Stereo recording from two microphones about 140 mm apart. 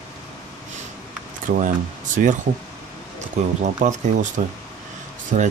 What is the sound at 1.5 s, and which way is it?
Speech, 85° right.